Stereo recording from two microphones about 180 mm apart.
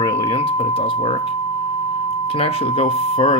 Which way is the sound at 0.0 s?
25° left (ahead or behind).